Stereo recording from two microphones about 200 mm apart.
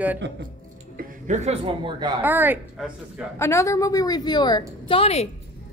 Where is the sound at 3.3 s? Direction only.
15° left (ahead or behind); by 5.3 s 30° left (ahead or behind).